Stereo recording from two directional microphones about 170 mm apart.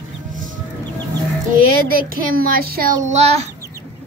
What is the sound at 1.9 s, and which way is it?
A woman's voice, 60° right (ahead or behind).